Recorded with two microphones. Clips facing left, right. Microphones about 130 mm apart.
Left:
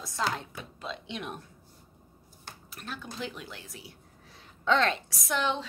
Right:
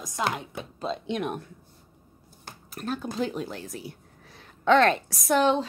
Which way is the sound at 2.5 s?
45° right (ahead or behind).